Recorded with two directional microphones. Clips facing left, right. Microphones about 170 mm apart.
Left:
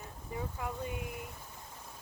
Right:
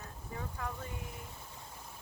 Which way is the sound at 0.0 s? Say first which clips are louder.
Left 3 dB; 15° left (ahead or behind).